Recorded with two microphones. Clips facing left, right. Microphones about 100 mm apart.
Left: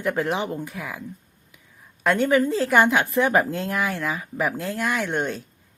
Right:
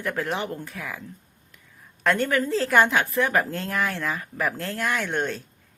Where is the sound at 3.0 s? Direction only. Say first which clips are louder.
Left 3 dB; 20° left (ahead or behind).